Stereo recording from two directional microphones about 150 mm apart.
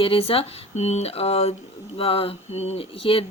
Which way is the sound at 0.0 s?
40° left (ahead or behind).